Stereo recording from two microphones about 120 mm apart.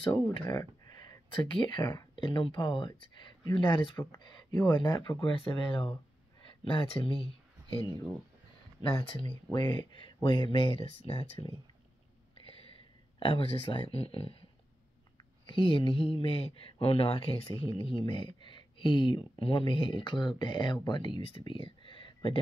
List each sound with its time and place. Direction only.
0.0 s speech: 45° left (ahead or behind)
0.6 s speech: 35° left (ahead or behind)
3.9 s speech: 25° left (ahead or behind)
4.2 s speech: 40° left (ahead or behind)
6.4 s a sound: 45° left (ahead or behind)
7.8 s speech: 30° left (ahead or behind)
8.8 s speech: 45° left (ahead or behind)
13.2 s speech: 45° left (ahead or behind)
15.4 s speech: 45° left (ahead or behind)